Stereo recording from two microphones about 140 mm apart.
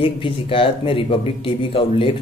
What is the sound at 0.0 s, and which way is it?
Speech, 40° left (ahead or behind).